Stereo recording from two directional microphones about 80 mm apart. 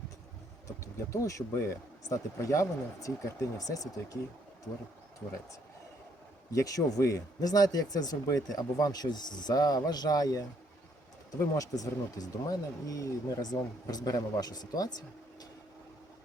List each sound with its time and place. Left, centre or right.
0.8 s speech: left
6.5 s speech: left